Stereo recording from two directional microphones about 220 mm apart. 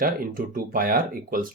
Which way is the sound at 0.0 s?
40° right (ahead or behind).